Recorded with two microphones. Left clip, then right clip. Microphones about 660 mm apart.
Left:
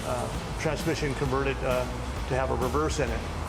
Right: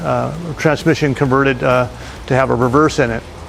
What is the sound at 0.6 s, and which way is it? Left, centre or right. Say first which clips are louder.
Speech: right 15 dB; right.